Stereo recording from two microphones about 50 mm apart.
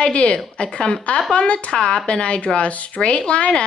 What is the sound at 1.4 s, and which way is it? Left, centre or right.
A woman's voice, left.